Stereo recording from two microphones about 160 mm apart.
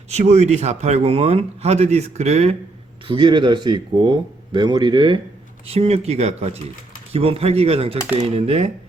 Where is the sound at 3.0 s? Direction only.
30° right (ahead or behind).